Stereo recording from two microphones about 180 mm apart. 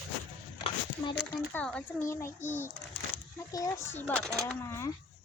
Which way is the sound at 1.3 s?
10° left (ahead or behind).